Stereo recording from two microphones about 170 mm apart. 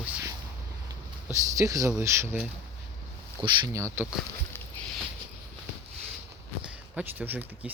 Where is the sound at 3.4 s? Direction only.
30° right (ahead or behind).